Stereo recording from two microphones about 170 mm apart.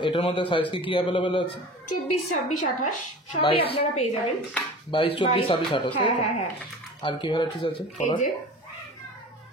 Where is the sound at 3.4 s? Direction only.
30° left (ahead or behind).